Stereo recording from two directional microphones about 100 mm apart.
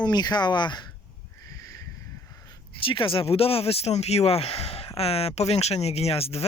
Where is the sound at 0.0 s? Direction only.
45° left (ahead or behind).